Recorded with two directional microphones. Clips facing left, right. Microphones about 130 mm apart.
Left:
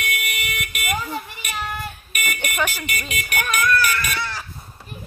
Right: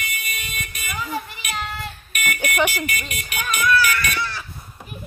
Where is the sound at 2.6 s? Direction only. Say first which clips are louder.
Right 4 dB; 10° right (ahead or behind).